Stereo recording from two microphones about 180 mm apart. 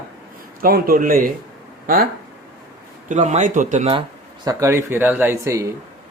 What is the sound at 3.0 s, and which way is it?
Speech, 40° right (ahead or behind).